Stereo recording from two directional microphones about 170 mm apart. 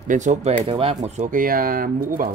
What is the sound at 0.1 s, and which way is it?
Speech, 45° right (ahead or behind).